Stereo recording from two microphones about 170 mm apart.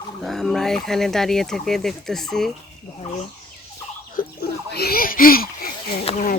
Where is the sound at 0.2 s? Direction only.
Centre (ahead or behind).